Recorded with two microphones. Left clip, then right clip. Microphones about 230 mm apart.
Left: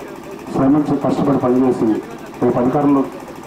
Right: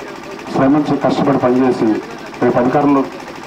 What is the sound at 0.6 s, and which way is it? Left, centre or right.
Speech, right.